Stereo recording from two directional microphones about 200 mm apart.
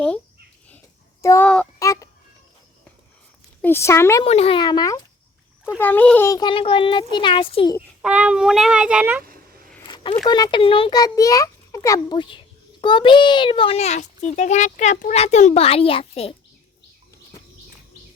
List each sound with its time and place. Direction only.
1.2 s speech: 10° left (ahead or behind)
1.8 s fowl: 15° left (ahead or behind)
3.6 s speech: 10° left (ahead or behind)
4.2 s a child's voice: 30° left (ahead or behind)
5.8 s a child's voice: 10° left (ahead or behind); by 7.8 s 25° left (ahead or behind)
7.8 s a child's voice: 5° right (ahead or behind)
9.8 s a sound: 25° left (ahead or behind)
10.2 s a child's voice: 20° left (ahead or behind)